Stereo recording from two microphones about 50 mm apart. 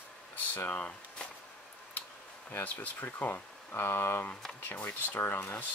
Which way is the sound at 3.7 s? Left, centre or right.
Left.